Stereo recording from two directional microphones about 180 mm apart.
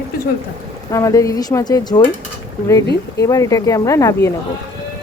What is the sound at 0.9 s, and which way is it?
Speech, 15° left (ahead or behind).